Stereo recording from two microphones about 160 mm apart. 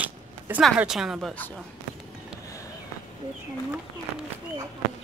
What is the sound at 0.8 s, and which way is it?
Speech, 5° right (ahead or behind).